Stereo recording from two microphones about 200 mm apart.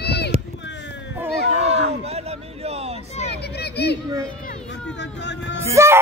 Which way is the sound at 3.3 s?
55° left (ahead or behind).